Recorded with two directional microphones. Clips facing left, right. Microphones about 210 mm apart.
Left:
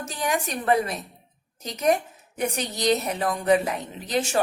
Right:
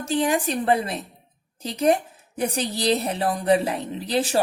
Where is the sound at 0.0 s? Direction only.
30° right (ahead or behind).